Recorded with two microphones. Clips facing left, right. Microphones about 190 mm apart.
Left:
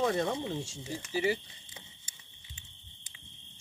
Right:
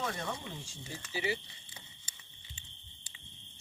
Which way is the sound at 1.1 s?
45° left (ahead or behind).